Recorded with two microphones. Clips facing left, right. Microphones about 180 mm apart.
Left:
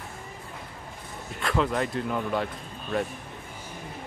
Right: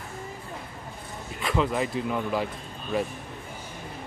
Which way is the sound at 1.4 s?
Centre (ahead or behind).